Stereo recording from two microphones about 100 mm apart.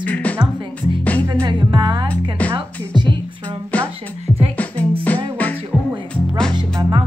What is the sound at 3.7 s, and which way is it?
Music, 15° left (ahead or behind).